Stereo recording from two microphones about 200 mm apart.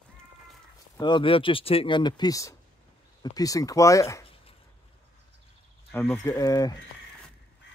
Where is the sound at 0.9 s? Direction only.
20° left (ahead or behind).